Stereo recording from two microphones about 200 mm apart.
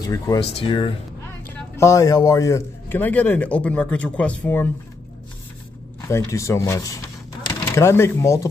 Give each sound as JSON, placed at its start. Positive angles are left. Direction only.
{"t": 0.0, "sound": "a man's voice", "side_deg": 20}
{"t": 5.9, "sound": "a man's voice", "side_deg": 15}